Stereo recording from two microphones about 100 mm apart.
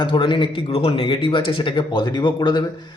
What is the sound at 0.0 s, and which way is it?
Speech, 55° left (ahead or behind).